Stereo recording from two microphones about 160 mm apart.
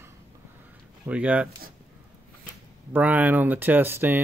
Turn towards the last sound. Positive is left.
turn(degrees=-15)  # may be behind; listen again after turning